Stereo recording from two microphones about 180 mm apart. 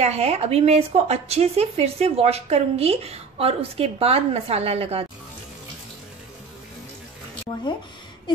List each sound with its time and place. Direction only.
0.0 s speech: 35° right (ahead or behind)